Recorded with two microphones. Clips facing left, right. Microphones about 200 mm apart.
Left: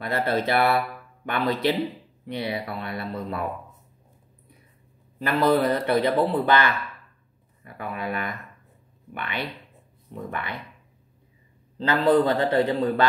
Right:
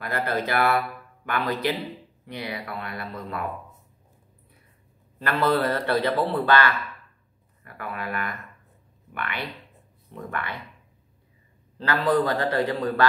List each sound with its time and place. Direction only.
0.0 s speech: 25° left (ahead or behind)
5.2 s a man's voice: 15° left (ahead or behind)
11.8 s speech: 20° left (ahead or behind)